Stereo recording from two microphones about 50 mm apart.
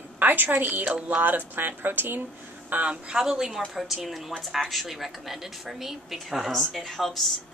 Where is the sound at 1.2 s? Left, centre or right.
Right.